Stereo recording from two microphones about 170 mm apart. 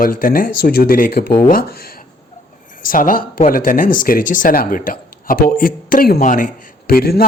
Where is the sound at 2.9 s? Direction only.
55° left (ahead or behind).